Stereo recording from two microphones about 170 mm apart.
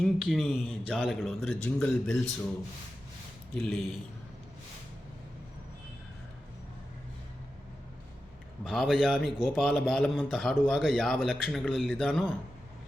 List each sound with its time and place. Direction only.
0.0 s a man's voice: centre (ahead or behind)
3.5 s a man's voice: 5° left (ahead or behind)
8.6 s a man's voice: centre (ahead or behind)